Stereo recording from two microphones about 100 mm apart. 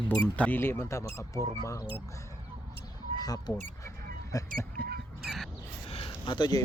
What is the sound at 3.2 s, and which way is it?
Speech, 40° left (ahead or behind).